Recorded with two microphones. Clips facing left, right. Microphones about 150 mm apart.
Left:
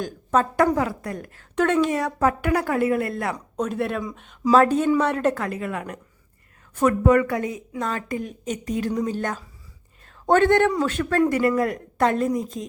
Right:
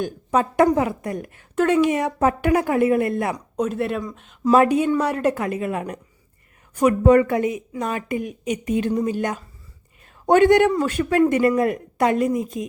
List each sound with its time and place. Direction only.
0.0 s a woman's voice: 15° right (ahead or behind)
1.5 s a woman's voice: 5° right (ahead or behind)
1.9 s a woman's voice: 20° right (ahead or behind)
3.6 s speech: centre (ahead or behind)
4.5 s a woman's voice: 10° right (ahead or behind)
5.3 s a woman's voice: 20° right (ahead or behind)
7.0 s a woman's voice: 30° right (ahead or behind); by 11.3 s 10° right (ahead or behind)
11.3 s a woman's voice: 20° right (ahead or behind)